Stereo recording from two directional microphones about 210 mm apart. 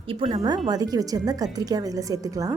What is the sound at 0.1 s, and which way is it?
A woman's voice, 25° right (ahead or behind).